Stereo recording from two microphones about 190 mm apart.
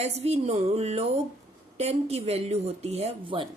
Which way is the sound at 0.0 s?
35° right (ahead or behind).